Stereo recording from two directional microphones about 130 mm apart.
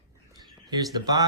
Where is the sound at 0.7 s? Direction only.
30° right (ahead or behind).